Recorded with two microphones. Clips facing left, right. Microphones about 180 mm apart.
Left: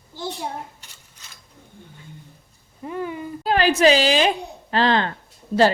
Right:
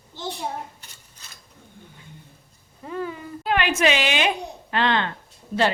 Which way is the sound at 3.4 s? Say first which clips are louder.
Left 5 dB; 35° left (ahead or behind).